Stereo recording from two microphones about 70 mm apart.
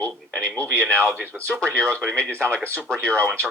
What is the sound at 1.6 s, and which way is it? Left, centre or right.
Speech, centre.